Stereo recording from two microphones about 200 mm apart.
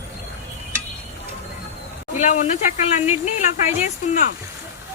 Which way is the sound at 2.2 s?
40° left (ahead or behind).